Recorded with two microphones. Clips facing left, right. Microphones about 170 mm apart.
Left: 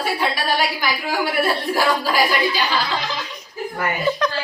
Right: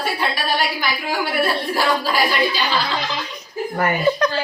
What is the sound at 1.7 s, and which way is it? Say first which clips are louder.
Speech: left 1 dB; 10° left (ahead or behind).